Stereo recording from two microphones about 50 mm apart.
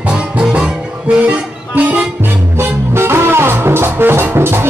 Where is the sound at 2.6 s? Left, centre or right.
Right.